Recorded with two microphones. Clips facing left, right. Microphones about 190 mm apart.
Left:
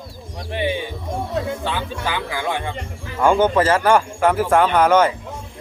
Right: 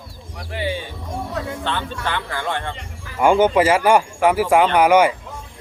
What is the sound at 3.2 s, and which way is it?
Speech, 10° right (ahead or behind).